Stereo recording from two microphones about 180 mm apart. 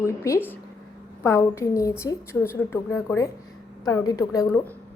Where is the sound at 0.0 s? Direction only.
15° left (ahead or behind).